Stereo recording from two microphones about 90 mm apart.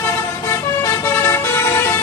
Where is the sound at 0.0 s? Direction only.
30° left (ahead or behind).